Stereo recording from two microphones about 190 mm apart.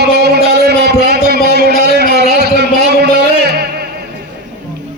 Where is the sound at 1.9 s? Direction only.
60° right (ahead or behind).